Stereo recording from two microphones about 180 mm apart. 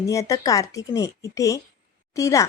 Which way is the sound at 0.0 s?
20° left (ahead or behind).